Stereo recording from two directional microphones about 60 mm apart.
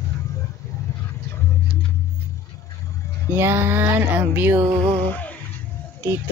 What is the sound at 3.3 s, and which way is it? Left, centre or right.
Speech, right.